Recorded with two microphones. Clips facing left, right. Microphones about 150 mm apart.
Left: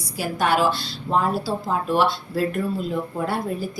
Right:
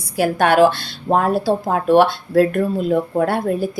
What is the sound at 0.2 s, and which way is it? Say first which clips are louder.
Speech: right 8 dB; 60° right (ahead or behind).